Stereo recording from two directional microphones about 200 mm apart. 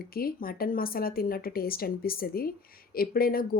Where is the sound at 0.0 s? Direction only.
50° left (ahead or behind).